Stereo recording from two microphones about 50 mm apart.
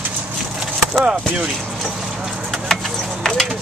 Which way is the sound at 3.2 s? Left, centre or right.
Centre.